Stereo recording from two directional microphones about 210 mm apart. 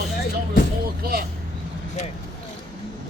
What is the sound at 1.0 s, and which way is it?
Speech, 45° right (ahead or behind).